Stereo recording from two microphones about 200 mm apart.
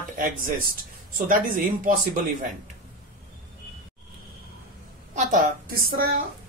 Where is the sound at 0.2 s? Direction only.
45° right (ahead or behind).